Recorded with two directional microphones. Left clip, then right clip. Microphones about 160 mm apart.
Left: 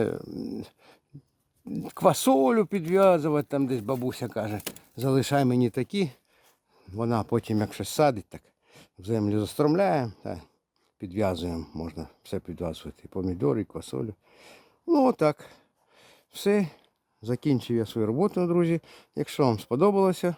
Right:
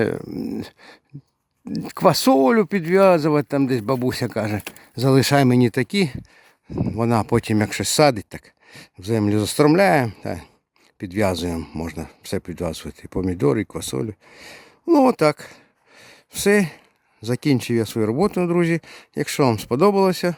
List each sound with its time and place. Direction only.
0.0 s speech: 20° right (ahead or behind)